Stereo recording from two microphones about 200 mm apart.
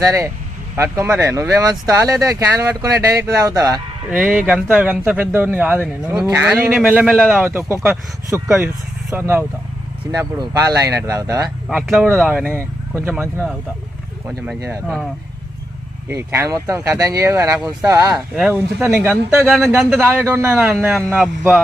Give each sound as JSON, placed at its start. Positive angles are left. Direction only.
{"t": 0.0, "sound": "speech", "side_deg": -15}
{"t": 4.2, "sound": "a man's voice", "side_deg": -5}
{"t": 7.4, "sound": "a man's voice", "side_deg": -10}
{"t": 16.0, "sound": "speech", "side_deg": -15}
{"t": 18.1, "sound": "a man's voice", "side_deg": 0}